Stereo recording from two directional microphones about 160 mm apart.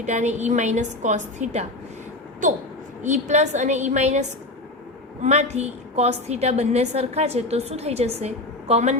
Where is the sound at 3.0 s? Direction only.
50° right (ahead or behind).